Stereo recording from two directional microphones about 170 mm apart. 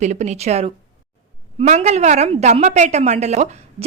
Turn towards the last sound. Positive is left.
turn(degrees=-40)  # may be behind; listen again after turning